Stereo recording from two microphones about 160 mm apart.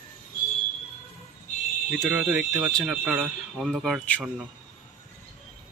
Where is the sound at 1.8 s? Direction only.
5° right (ahead or behind).